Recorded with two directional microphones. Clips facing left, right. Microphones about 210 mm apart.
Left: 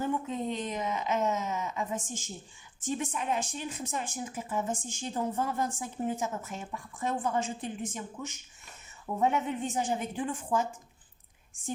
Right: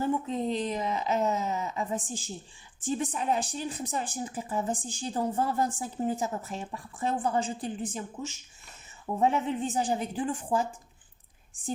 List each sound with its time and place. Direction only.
0.4 s a woman's voice: 35° right (ahead or behind)